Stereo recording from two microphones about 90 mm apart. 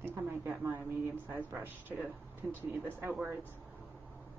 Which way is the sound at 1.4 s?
20° right (ahead or behind).